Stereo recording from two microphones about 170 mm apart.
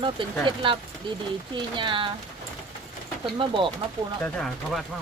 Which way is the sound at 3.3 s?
30° right (ahead or behind).